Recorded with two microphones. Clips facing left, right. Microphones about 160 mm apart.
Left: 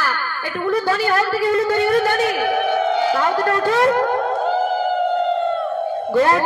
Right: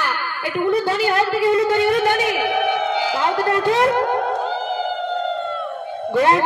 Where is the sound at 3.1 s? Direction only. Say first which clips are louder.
Left 1 dB; 25° right (ahead or behind).